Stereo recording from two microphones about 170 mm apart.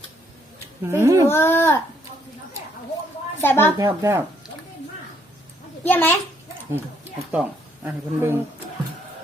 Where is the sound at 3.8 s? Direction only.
15° right (ahead or behind).